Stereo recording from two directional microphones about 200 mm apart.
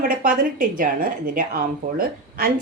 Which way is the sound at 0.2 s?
45° right (ahead or behind).